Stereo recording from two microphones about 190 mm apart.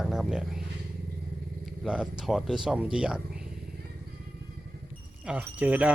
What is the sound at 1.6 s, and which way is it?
Speech, centre (ahead or behind).